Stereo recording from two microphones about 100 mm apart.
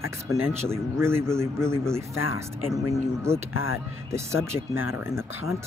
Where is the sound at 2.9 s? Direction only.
25° right (ahead or behind).